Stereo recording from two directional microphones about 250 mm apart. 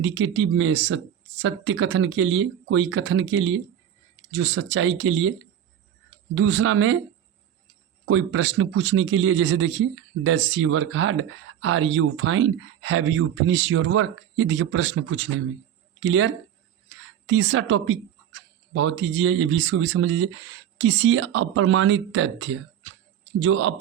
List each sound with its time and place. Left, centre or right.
0.0 s a man's voice: right
6.3 s a man's voice: right
8.0 s a man's voice: right